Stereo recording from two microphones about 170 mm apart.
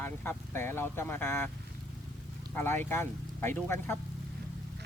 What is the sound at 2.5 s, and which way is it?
Speech, 15° left (ahead or behind).